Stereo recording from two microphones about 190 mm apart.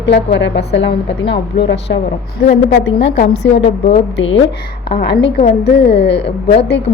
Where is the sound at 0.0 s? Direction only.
65° left (ahead or behind).